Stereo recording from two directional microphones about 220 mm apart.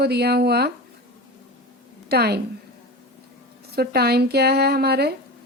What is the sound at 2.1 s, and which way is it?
Speech, 45° right (ahead or behind).